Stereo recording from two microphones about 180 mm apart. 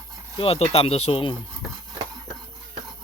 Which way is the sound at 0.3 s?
30° left (ahead or behind).